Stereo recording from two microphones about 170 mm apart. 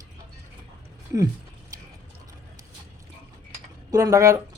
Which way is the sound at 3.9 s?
20° right (ahead or behind).